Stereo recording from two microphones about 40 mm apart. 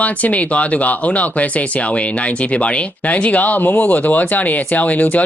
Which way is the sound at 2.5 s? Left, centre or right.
Left.